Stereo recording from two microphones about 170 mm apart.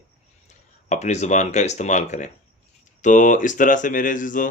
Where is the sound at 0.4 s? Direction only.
45° left (ahead or behind).